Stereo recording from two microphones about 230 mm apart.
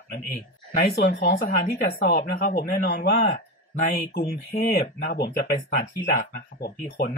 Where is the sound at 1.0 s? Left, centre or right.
Left.